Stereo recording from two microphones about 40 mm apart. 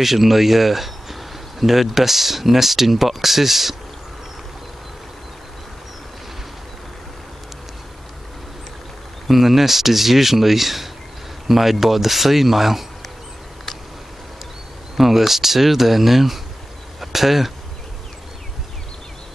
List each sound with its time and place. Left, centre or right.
0.0 s speech: centre
9.3 s speech: centre
15.0 s speech: centre